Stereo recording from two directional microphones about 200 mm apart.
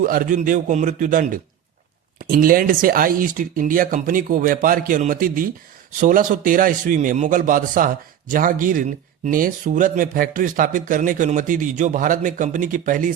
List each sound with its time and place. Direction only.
0.0 s a man's voice: 45° right (ahead or behind)